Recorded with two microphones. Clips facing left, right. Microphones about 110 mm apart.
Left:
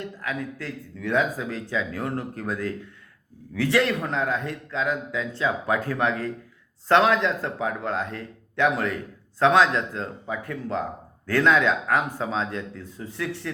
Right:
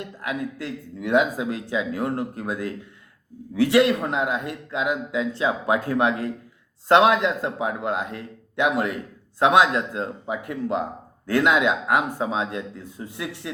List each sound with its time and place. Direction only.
0.0 s a man's voice: 15° right (ahead or behind)